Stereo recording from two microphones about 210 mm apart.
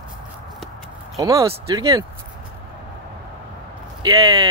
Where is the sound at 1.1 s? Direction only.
15° right (ahead or behind).